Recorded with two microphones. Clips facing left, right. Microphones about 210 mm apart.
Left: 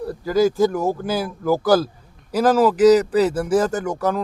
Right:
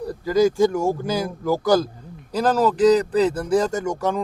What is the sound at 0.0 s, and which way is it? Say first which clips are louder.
Speech: even; centre (ahead or behind).